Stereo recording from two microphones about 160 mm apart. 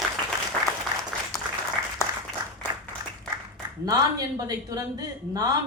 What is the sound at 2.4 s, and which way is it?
Applause, 25° right (ahead or behind).